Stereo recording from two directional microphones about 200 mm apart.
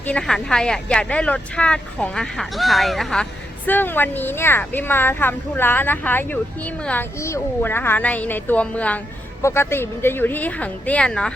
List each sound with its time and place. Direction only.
0.0 s speech: 5° left (ahead or behind)